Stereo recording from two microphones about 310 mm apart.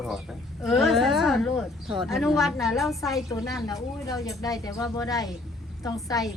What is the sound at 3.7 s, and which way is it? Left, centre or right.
Speech, centre.